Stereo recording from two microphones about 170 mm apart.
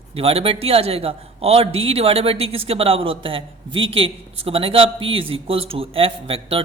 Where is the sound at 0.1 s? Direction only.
35° right (ahead or behind).